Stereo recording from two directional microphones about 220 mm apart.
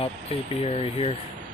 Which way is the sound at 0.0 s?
25° left (ahead or behind).